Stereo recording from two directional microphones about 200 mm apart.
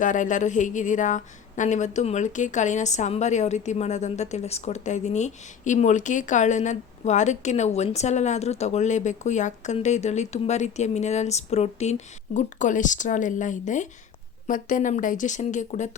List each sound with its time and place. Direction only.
0.0 s speech: 40° left (ahead or behind)